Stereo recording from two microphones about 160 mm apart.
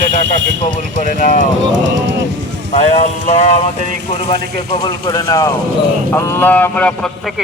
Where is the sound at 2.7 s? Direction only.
45° left (ahead or behind).